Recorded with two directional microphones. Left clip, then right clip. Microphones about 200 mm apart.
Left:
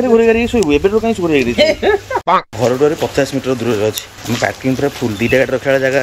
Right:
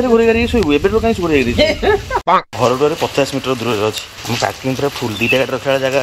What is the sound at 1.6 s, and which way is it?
Speech, 15° left (ahead or behind).